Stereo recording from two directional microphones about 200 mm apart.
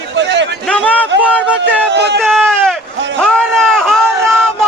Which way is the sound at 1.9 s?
55° right (ahead or behind).